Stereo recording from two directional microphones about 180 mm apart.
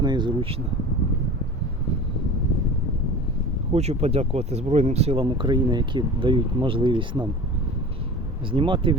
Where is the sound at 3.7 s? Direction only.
35° right (ahead or behind).